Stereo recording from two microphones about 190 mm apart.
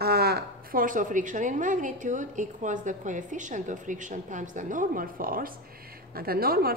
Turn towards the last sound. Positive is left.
turn(degrees=-55)  # may be behind; listen again after turning